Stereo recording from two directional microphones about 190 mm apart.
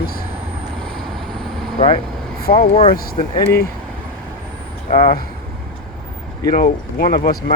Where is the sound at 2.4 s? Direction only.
50° left (ahead or behind).